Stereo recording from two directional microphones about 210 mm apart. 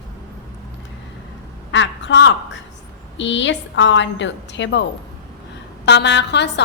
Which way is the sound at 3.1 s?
60° left (ahead or behind).